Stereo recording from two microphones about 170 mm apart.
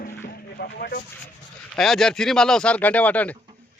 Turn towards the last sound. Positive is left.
turn(degrees=10)  # may be behind; listen again after turning